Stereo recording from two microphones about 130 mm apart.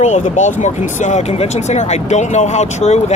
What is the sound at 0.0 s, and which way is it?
Speech, 65° left (ahead or behind).